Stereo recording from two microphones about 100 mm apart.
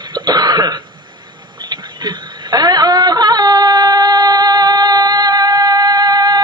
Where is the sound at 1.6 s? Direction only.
50° right (ahead or behind).